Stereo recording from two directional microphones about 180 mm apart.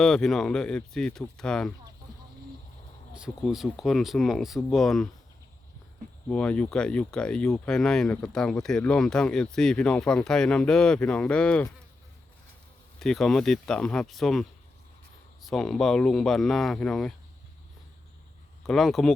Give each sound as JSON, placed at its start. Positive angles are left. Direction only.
{"t": 0.0, "sound": "speech", "side_deg": 0}
{"t": 3.1, "sound": "speech", "side_deg": -5}
{"t": 6.2, "sound": "speech", "side_deg": 5}
{"t": 13.0, "sound": "speech", "side_deg": 0}
{"t": 18.6, "sound": "speech", "side_deg": 0}